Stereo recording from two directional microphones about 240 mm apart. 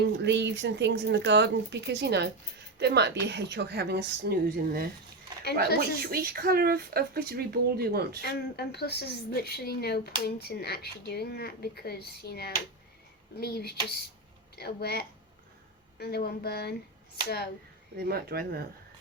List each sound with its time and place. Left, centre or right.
0.0 s a woman's voice: right
6.1 s speech: right
8.2 s a woman's voice: left
17.9 s speech: right